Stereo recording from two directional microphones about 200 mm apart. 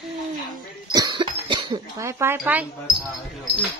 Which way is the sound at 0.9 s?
20° right (ahead or behind).